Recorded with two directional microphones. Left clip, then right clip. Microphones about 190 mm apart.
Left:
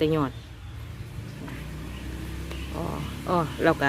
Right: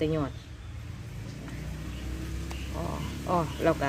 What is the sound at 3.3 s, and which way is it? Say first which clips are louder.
Speech: left 3 dB; 20° left (ahead or behind).